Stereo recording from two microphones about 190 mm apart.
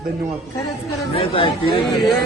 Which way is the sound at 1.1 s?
30° left (ahead or behind).